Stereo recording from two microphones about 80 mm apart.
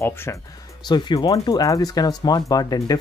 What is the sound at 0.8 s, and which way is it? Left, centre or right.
Speech, left.